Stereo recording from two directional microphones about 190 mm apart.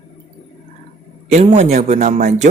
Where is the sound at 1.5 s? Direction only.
35° right (ahead or behind).